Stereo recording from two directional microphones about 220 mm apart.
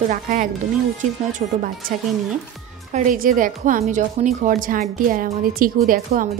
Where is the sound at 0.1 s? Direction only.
35° right (ahead or behind).